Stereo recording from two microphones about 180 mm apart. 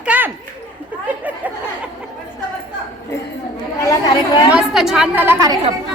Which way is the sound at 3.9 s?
20° left (ahead or behind).